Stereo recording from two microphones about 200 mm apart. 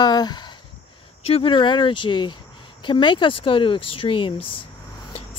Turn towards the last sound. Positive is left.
turn(degrees=25)  # may be behind; listen again after turning